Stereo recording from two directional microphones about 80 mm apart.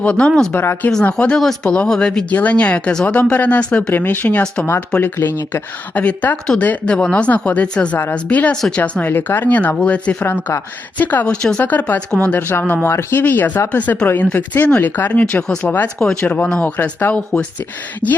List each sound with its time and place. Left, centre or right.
0.0 s speech: centre
0.5 s speech: left
1.4 s speech: centre
3.9 s speech: left
12.4 s speech: left